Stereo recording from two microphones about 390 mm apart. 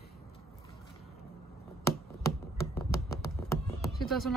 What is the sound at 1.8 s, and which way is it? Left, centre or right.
Hands, centre.